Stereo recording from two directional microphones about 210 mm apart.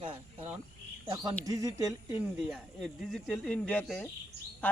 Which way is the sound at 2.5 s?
Centre (ahead or behind).